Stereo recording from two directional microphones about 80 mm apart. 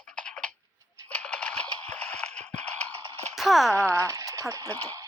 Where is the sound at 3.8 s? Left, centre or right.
Right.